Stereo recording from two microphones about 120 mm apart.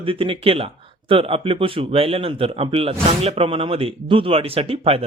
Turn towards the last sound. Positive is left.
turn(degrees=-55)  # may be behind; listen again after turning